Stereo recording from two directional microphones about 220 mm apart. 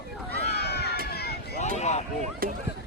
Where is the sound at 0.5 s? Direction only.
45° left (ahead or behind).